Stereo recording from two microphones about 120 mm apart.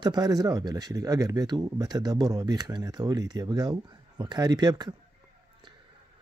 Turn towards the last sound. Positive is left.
turn(degrees=-35)  # may be behind; listen again after turning